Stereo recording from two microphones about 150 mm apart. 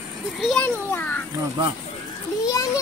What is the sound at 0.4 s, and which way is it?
Speech, 5° left (ahead or behind).